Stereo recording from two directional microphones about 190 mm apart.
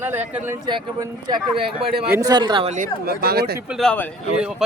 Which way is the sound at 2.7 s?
50° right (ahead or behind).